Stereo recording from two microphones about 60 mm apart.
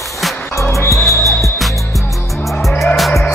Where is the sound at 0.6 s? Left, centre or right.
Left.